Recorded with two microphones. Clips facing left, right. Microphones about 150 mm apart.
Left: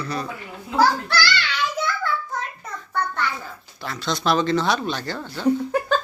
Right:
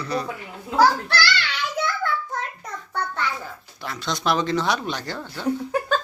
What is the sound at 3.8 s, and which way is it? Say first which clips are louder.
Speech: left 2 dB; 15° right (ahead or behind).